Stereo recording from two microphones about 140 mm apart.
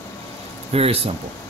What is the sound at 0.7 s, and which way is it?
Speech, 45° right (ahead or behind).